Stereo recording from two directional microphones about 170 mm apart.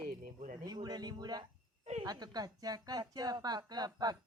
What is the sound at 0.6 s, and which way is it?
A woman's voice, 25° right (ahead or behind).